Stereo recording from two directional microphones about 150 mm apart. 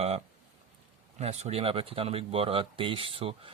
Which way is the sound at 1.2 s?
45° right (ahead or behind).